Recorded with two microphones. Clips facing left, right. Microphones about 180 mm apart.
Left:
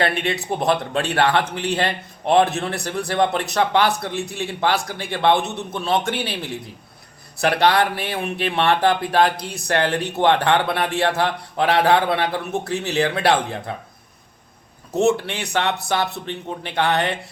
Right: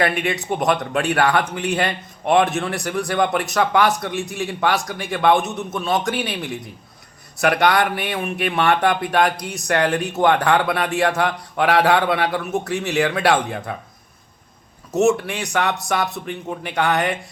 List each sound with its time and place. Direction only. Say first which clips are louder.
0.0 s a man's voice: right 1 dB; 30° left (ahead or behind)
14.9 s a man's voice: right 1 dB; 30° left (ahead or behind)